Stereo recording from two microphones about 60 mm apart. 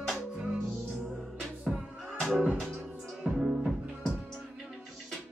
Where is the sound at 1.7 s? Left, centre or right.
Centre.